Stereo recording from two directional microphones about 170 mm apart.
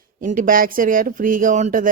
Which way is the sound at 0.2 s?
50° right (ahead or behind).